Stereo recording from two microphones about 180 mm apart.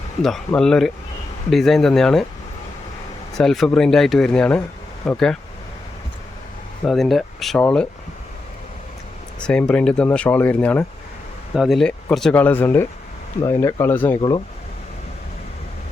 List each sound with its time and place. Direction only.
0.2 s speech: centre (ahead or behind)
3.3 s speech: centre (ahead or behind)
6.8 s speech: centre (ahead or behind)
9.4 s speech: 5° left (ahead or behind)
14.2 s speech: 25° left (ahead or behind)